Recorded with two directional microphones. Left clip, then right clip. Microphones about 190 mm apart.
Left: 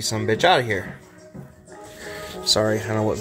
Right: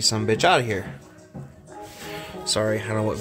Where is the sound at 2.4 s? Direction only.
15° left (ahead or behind).